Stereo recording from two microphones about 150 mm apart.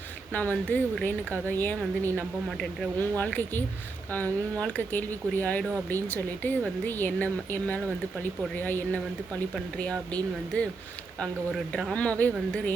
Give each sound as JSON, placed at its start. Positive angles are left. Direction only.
{"t": 0.3, "sound": "speech", "side_deg": 10}
{"t": 11.7, "sound": "speech", "side_deg": 5}